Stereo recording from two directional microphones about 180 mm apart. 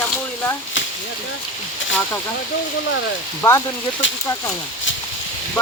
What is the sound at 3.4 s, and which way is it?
Speech, 15° left (ahead or behind).